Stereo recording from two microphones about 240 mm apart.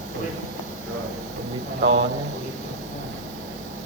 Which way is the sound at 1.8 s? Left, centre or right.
Right.